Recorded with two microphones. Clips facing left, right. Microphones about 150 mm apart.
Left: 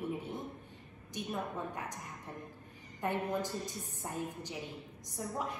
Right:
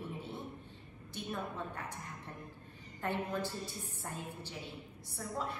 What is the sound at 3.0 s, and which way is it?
A woman's voice, 15° left (ahead or behind).